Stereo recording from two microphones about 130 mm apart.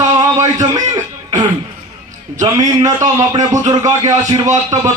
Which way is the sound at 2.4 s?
25° right (ahead or behind).